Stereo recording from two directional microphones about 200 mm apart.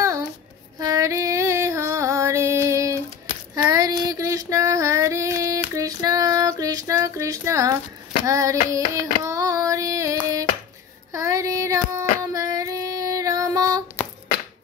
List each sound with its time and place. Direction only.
0.7 s female singing: 15° right (ahead or behind)
8.3 s hands: 15° right (ahead or behind)
9.2 s child singing: 15° right (ahead or behind)
11.1 s female singing: 15° right (ahead or behind)